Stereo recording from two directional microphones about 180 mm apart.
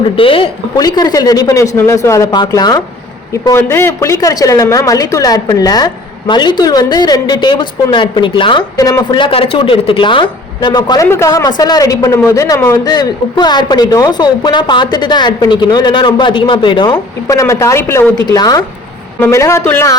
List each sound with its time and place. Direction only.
0.2 s a woman's voice: 30° left (ahead or behind); by 20.0 s 15° left (ahead or behind)